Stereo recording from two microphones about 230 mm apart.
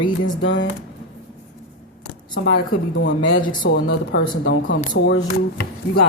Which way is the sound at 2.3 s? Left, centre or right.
Left.